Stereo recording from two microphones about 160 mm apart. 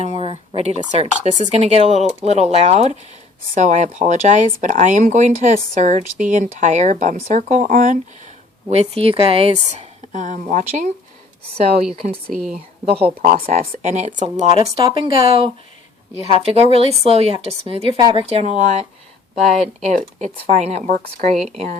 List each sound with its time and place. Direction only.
0.0 s speech: 40° right (ahead or behind)
8.7 s speech: 40° right (ahead or behind)
12.8 s a woman's voice: 40° right (ahead or behind)
14.8 s a woman's voice: 30° right (ahead or behind); by 21.2 s 55° right (ahead or behind)
21.3 s speech: centre (ahead or behind)